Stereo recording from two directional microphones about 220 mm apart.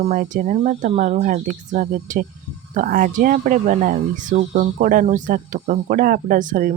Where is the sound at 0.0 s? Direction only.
35° right (ahead or behind).